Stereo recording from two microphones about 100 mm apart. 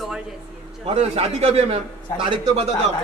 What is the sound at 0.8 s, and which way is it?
A man's voice, 90° right.